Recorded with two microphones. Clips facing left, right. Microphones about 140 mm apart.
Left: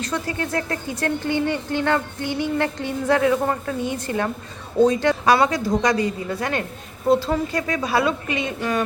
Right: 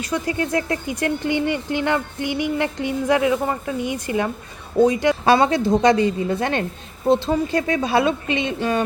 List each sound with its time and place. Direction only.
0.0 s speech: 15° right (ahead or behind)
5.2 s speech: 25° right (ahead or behind)